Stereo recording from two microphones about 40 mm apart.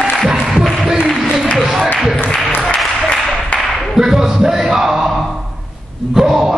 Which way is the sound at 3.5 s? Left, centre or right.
Left.